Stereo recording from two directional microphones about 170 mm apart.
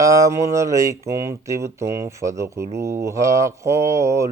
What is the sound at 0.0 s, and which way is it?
Speech, 20° right (ahead or behind).